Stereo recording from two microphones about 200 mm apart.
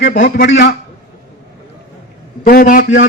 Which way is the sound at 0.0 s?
45° left (ahead or behind).